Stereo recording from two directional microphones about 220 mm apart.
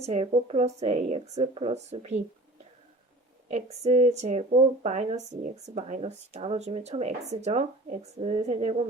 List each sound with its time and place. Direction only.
0.0 s speech: 30° right (ahead or behind)
3.5 s speech: 30° right (ahead or behind)